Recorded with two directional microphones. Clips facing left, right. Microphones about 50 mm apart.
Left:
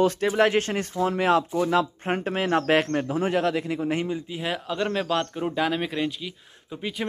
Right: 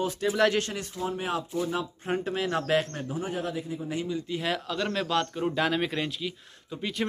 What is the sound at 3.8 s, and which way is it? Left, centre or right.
Speech, left.